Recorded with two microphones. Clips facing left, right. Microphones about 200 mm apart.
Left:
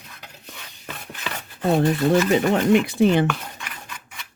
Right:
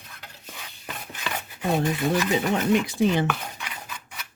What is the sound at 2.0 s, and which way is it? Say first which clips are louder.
Speech: left 6 dB; 70° left (ahead or behind).